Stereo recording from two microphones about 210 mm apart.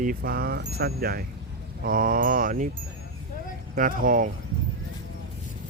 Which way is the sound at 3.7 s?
40° right (ahead or behind).